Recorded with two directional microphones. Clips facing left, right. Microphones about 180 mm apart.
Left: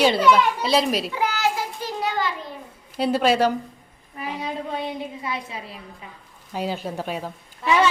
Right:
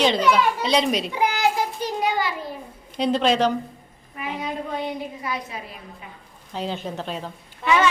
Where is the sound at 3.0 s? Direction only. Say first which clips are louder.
Left 1 dB; 5° left (ahead or behind).